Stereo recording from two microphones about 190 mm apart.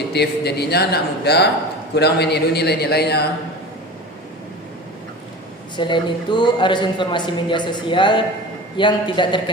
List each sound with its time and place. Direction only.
0.1 s speech: 60° left (ahead or behind)
5.7 s speech: 25° left (ahead or behind)